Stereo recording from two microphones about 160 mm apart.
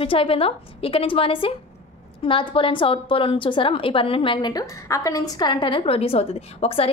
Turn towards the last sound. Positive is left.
turn(degrees=35)  # may be behind; listen again after turning